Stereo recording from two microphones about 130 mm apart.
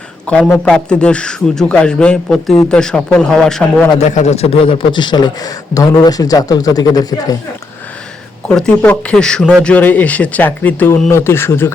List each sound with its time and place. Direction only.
0.3 s a man's voice: 5° left (ahead or behind)
4.0 s a man's voice: 60° left (ahead or behind); by 7.3 s 30° left (ahead or behind)
8.4 s a man's voice: 10° left (ahead or behind)